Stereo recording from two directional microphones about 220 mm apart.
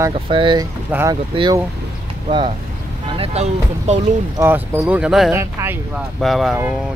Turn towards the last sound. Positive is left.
turn(degrees=0)  # may be behind; listen again after turning